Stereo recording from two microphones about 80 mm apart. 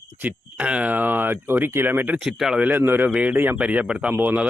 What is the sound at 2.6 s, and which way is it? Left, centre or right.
Speech, right.